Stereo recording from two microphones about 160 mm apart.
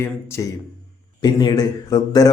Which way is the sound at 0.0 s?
15° left (ahead or behind).